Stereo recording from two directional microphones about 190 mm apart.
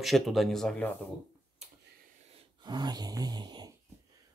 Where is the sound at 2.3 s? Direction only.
20° right (ahead or behind).